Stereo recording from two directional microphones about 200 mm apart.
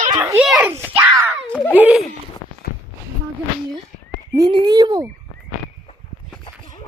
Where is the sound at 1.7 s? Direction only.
5° right (ahead or behind).